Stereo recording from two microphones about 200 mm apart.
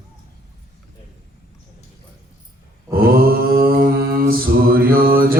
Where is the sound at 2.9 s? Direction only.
45° right (ahead or behind).